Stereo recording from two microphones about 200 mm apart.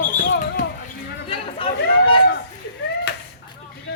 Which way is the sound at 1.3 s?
25° left (ahead or behind).